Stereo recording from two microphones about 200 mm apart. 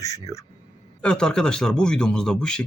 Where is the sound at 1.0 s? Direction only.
5° left (ahead or behind).